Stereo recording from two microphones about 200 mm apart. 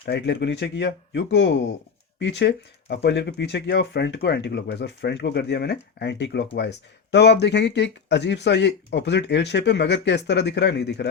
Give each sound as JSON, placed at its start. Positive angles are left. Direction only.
{"t": 0.0, "sound": "speech", "side_deg": 55}